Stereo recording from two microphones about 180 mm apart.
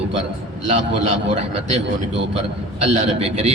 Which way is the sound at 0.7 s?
40° right (ahead or behind).